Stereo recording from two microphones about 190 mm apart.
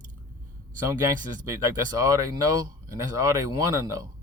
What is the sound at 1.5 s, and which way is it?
Speech, 15° right (ahead or behind).